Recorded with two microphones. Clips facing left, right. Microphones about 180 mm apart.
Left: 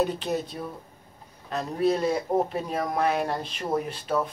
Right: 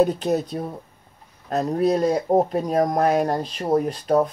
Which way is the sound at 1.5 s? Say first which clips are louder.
Right 5 dB; 40° right (ahead or behind).